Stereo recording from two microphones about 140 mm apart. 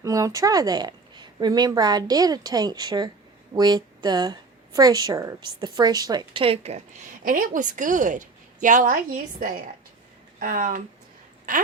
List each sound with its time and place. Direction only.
0.0 s speech: 25° right (ahead or behind)
6.4 s speech: 45° right (ahead or behind)
7.3 s a woman's voice: 80° right